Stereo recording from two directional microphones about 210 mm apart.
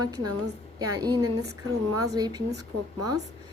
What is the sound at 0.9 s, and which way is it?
A woman's voice, 20° right (ahead or behind).